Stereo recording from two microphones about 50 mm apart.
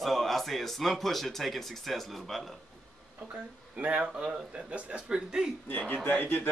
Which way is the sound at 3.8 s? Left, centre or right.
Right.